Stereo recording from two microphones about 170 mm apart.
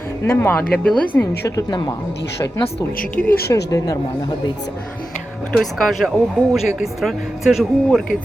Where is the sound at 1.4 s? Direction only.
20° left (ahead or behind).